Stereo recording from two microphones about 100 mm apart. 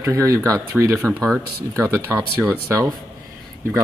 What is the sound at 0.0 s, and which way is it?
Speech, 30° right (ahead or behind).